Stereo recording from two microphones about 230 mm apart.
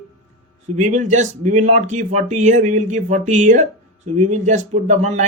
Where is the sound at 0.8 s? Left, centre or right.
Right.